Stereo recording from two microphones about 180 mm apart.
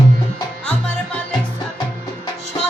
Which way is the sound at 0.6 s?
5° left (ahead or behind).